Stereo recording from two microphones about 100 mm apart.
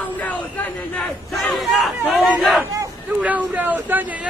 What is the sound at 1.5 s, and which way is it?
Speech, centre (ahead or behind).